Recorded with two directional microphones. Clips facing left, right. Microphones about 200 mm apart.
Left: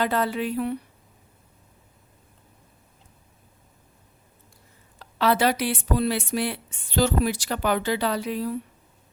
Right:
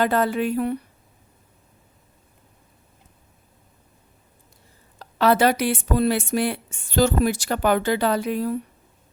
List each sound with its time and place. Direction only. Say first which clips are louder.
0.0 s speech: right 4 dB; 50° right (ahead or behind)
4.9 s speech: right 4 dB; 45° right (ahead or behind)